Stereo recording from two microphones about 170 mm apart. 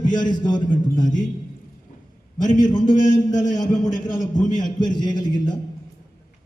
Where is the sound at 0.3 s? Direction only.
25° left (ahead or behind).